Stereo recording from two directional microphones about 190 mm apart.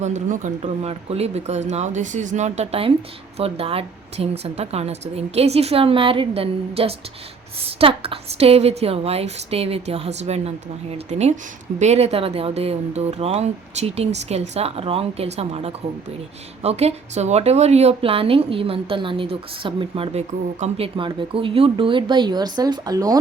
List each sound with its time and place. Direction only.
0.0 s a woman's voice: 40° right (ahead or behind); by 23.1 s 20° right (ahead or behind)